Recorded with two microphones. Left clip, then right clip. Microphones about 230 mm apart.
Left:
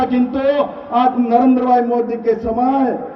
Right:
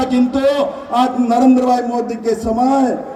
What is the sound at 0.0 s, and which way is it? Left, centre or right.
A man's voice, right.